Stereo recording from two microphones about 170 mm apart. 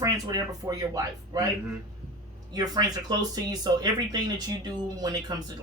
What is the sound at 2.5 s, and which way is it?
Speech, 20° right (ahead or behind).